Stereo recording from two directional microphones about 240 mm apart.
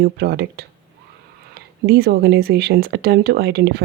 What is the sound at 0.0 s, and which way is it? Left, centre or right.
Speech, right.